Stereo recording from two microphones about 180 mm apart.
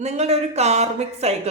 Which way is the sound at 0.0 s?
35° right (ahead or behind).